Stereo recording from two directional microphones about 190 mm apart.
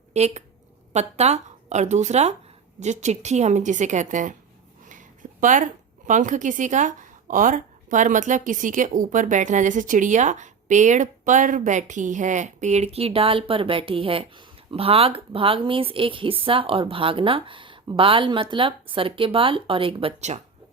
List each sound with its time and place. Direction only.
0.1 s a woman's voice: 35° right (ahead or behind)